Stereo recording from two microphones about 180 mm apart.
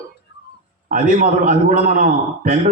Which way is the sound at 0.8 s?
55° right (ahead or behind).